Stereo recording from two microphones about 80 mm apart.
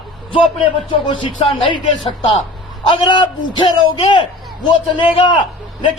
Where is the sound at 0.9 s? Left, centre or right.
Left.